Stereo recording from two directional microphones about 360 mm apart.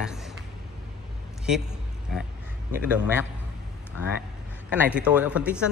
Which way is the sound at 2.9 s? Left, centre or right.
Centre.